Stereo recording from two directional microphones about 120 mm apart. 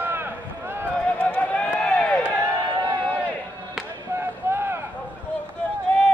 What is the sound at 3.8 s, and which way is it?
Music, 5° right (ahead or behind).